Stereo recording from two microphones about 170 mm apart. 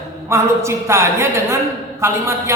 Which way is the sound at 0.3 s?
15° right (ahead or behind).